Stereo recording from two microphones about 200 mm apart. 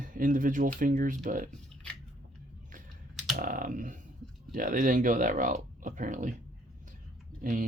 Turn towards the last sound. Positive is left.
turn(degrees=-40)  # may be behind; listen again after turning